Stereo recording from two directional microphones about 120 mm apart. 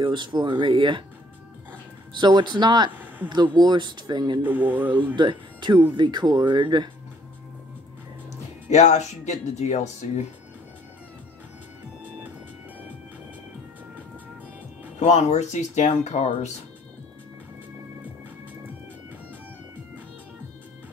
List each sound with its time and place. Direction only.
0.0 s speech: 40° right (ahead or behind)
2.1 s speech: 40° right (ahead or behind)
2.9 s a sound: 15° right (ahead or behind)
3.3 s speech: 40° right (ahead or behind)
4.4 s speech: 15° right (ahead or behind)
5.1 s speech: 40° right (ahead or behind)
8.6 s speech: 70° left (ahead or behind)
15.0 s speech: 70° left (ahead or behind)